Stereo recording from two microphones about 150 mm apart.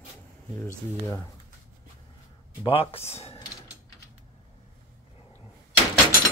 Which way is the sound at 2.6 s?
35° left (ahead or behind).